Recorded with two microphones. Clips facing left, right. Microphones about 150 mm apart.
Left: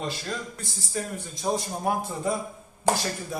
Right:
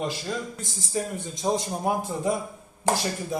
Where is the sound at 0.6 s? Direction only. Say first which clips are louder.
Right 3 dB; 20° right (ahead or behind).